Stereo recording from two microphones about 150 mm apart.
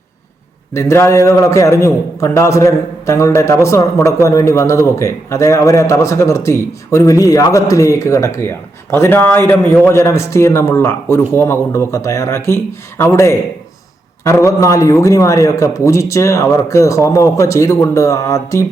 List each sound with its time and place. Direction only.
0.7 s a man's voice: 20° left (ahead or behind)